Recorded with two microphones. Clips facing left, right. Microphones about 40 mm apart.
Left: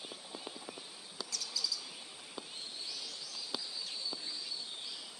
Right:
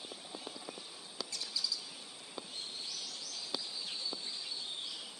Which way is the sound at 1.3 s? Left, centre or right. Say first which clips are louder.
Left 1 dB; right.